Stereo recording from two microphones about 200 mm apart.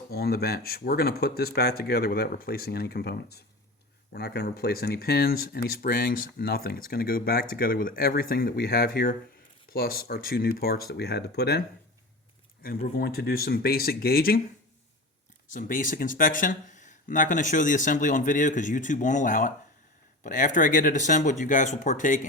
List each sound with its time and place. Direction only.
0.1 s speech: 50° left (ahead or behind)
12.6 s speech: 45° left (ahead or behind)
15.4 s speech: 40° left (ahead or behind)